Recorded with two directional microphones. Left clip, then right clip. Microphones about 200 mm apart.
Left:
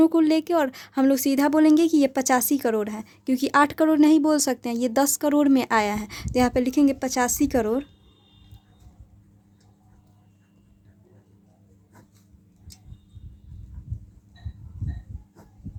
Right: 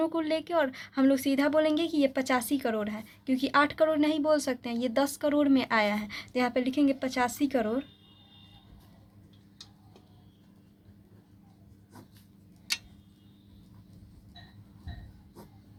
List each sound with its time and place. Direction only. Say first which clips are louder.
0.0 s a woman's voice: left 10 dB; 50° left (ahead or behind)